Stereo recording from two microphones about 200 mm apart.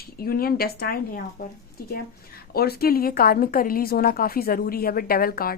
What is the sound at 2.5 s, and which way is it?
Speech, 50° left (ahead or behind).